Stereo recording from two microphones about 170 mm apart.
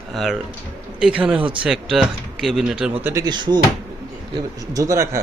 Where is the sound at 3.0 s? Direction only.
20° right (ahead or behind).